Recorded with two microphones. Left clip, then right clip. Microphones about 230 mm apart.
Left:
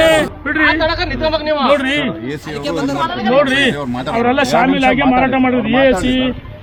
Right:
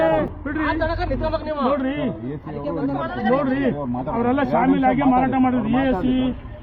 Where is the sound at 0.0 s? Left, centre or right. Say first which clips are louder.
Left 8 dB; left.